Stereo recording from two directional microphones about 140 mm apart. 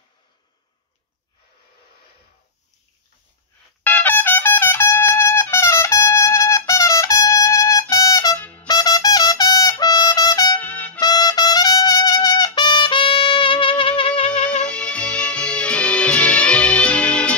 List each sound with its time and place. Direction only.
3.8 s trumpet: 15° left (ahead or behind)
7.9 s music: 25° left (ahead or behind)
8.4 s trumpet: 10° left (ahead or behind)
8.6 s trumpet: 25° left (ahead or behind)
10.6 s trumpet: 10° left (ahead or behind)
11.0 s trumpet: 25° left (ahead or behind)
14.4 s music: 10° left (ahead or behind)